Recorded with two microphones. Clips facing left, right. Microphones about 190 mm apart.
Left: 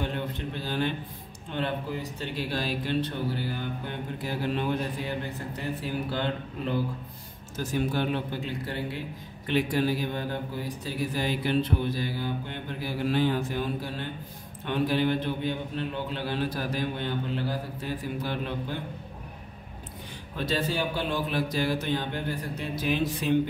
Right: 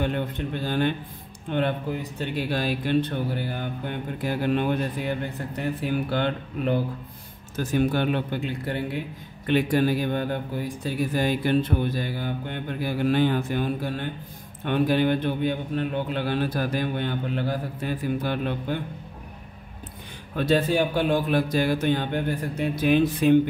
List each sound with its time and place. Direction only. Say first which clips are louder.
0.0 s a man's voice: right 5 dB; 55° right (ahead or behind)
20.3 s speech: right 7 dB; 55° right (ahead or behind)